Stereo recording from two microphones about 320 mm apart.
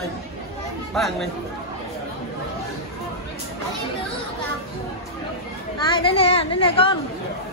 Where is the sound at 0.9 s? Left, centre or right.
Centre.